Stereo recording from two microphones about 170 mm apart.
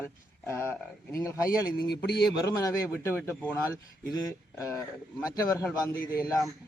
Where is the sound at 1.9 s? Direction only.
75° left (ahead or behind).